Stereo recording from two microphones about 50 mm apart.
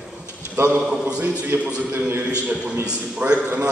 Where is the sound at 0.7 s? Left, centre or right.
Right.